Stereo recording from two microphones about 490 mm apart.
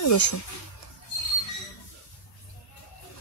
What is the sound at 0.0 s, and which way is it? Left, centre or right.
Speech, left.